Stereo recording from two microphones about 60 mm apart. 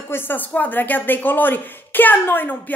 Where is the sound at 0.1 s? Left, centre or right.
Left.